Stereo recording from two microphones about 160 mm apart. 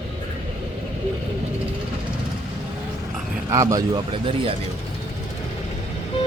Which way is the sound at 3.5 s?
20° right (ahead or behind).